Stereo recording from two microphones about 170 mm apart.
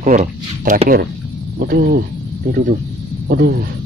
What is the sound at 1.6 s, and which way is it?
Speech, 60° right (ahead or behind).